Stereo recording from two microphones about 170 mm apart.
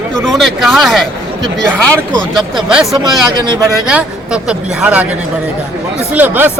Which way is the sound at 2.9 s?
25° right (ahead or behind).